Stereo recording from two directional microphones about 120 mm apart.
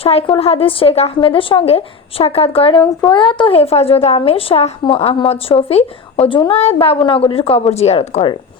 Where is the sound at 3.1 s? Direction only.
40° left (ahead or behind); by 8.3 s 60° left (ahead or behind).